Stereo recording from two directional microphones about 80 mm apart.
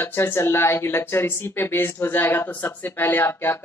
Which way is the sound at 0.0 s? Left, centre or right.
Left.